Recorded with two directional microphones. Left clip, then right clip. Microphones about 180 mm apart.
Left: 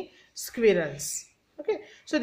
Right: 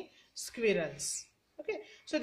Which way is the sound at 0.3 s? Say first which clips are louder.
Left 9 dB; 30° left (ahead or behind).